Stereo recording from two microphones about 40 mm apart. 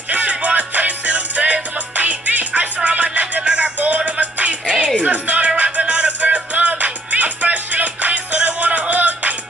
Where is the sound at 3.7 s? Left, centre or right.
Right.